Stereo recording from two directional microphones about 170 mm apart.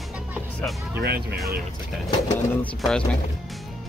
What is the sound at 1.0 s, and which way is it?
Speech, 75° right (ahead or behind).